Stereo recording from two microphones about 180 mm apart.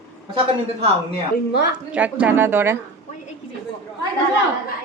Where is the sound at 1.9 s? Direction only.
5° right (ahead or behind).